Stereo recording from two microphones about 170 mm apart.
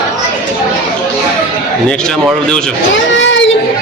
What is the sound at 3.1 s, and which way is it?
Speech, 90° left.